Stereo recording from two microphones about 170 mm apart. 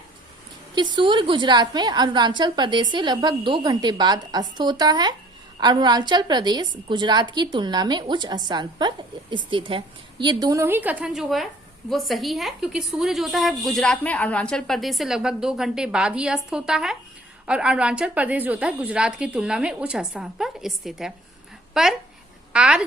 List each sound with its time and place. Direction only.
0.8 s a woman's voice: 25° right (ahead or behind); by 22.9 s 5° right (ahead or behind)